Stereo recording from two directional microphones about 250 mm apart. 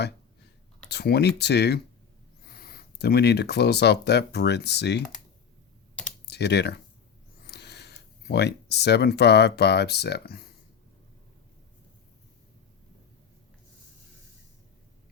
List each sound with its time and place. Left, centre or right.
0.9 s speech: left
6.2 s speech: left